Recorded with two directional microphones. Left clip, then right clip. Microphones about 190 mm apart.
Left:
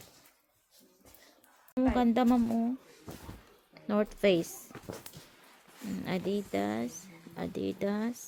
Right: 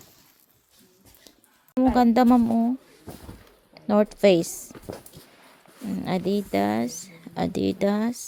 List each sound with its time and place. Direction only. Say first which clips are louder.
1.8 s speech: right 9 dB; 25° right (ahead or behind)
3.8 s speech: right 9 dB; 20° right (ahead or behind)
5.9 s speech: right 8 dB; 15° right (ahead or behind)